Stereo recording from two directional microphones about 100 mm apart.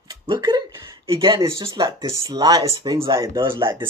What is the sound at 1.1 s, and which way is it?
Speech, 50° right (ahead or behind).